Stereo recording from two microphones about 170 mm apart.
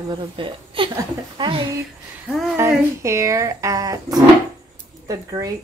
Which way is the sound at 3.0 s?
15° right (ahead or behind).